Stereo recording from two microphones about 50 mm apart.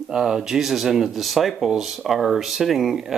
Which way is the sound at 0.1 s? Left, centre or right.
Centre.